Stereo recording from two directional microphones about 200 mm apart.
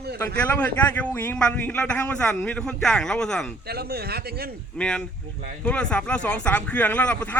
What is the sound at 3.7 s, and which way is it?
Speech, 50° right (ahead or behind).